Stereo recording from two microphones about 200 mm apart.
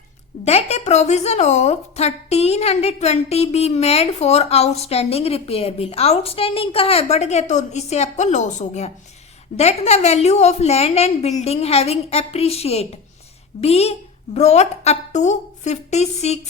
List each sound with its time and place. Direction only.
0.4 s speech: 30° left (ahead or behind)